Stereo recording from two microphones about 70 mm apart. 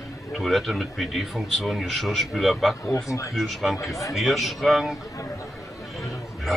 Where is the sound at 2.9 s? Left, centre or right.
Left.